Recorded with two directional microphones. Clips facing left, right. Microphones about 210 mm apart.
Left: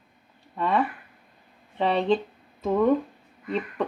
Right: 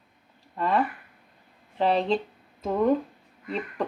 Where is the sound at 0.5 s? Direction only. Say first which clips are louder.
Even; centre (ahead or behind).